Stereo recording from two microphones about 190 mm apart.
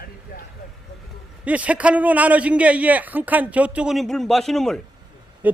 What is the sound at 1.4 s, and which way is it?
A man's voice, 5° right (ahead or behind).